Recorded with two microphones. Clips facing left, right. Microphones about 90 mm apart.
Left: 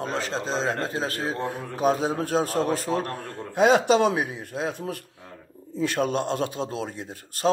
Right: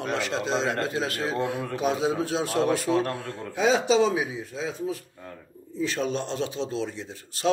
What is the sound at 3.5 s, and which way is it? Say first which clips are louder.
Speech: left 3 dB; 55° left (ahead or behind).